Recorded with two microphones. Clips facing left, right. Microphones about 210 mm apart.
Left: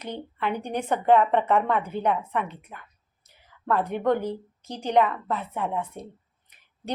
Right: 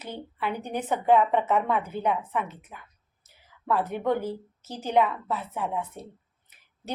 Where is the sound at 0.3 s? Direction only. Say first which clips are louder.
Left 2 dB; 5° right (ahead or behind).